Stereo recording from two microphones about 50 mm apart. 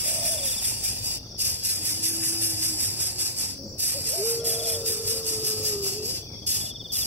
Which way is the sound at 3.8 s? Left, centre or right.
Right.